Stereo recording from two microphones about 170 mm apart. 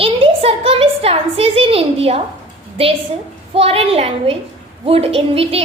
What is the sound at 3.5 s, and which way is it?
A woman's voice, 35° right (ahead or behind).